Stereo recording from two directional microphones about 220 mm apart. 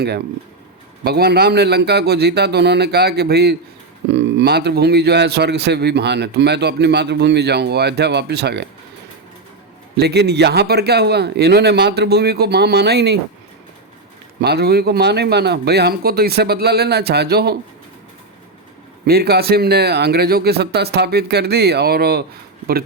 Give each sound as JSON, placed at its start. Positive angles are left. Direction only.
{"t": 1.0, "sound": "a man's voice", "side_deg": -45}
{"t": 10.0, "sound": "a man's voice", "side_deg": -50}
{"t": 14.4, "sound": "a man's voice", "side_deg": -45}
{"t": 19.0, "sound": "a man's voice", "side_deg": -45}